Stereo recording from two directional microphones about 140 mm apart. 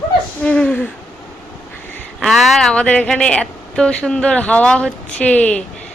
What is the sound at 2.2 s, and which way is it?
Speech, centre (ahead or behind).